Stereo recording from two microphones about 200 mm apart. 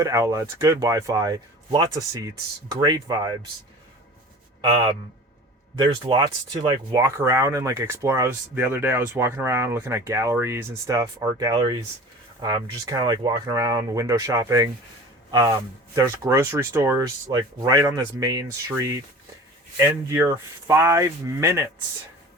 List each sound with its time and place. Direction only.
0.0 s speech: 15° right (ahead or behind)
5.7 s speech: 20° right (ahead or behind)